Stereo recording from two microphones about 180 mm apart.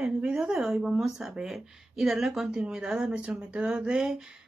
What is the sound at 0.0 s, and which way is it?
Speech, 5° right (ahead or behind).